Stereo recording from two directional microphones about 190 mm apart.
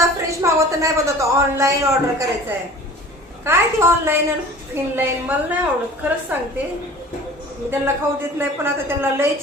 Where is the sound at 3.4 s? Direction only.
15° right (ahead or behind).